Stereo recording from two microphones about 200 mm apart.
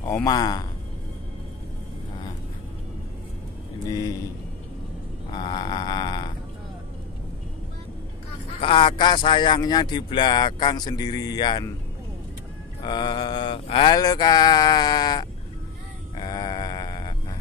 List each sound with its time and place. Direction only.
0.0 s speech: 15° left (ahead or behind)
3.9 s speech: 15° left (ahead or behind)
5.3 s a sound: 20° left (ahead or behind)
8.5 s speech: 25° left (ahead or behind)
12.8 s speech: 25° left (ahead or behind)
16.2 s sheep: 20° left (ahead or behind)